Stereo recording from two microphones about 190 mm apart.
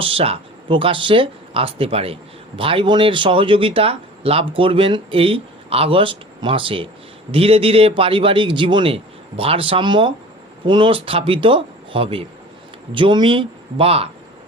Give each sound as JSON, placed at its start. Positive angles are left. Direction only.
{"t": 0.0, "sound": "speech", "side_deg": -30}